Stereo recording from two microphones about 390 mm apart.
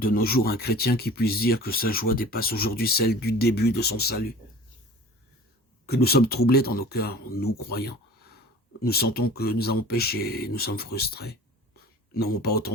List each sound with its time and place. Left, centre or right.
0.0 s speech: left
5.8 s speech: left